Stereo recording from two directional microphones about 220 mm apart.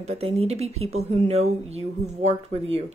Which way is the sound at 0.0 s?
30° right (ahead or behind).